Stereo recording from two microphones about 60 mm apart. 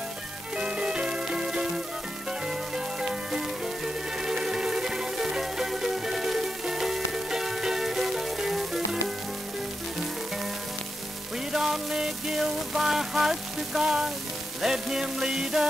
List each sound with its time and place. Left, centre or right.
0.6 s music: centre
11.5 s music: centre